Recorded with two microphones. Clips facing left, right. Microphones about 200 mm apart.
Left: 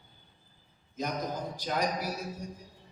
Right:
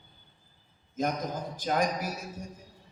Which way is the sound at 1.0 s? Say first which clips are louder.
Right 3 dB; 50° right (ahead or behind).